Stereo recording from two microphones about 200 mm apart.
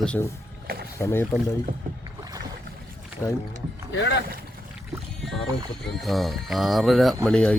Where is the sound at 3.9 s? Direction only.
60° left (ahead or behind).